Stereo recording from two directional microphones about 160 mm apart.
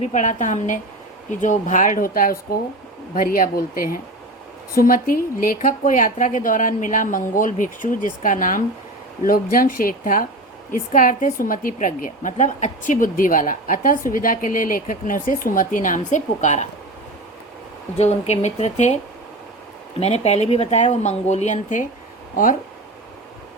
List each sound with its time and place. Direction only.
0.0 s a woman's voice: 50° left (ahead or behind)
17.9 s speech: 40° left (ahead or behind)
20.0 s speech: 40° left (ahead or behind)